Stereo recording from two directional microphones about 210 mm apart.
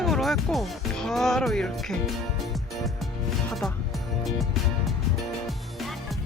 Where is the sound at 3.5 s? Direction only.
Centre (ahead or behind).